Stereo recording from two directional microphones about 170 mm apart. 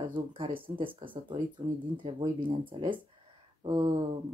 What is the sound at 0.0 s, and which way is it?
Speech, 30° right (ahead or behind).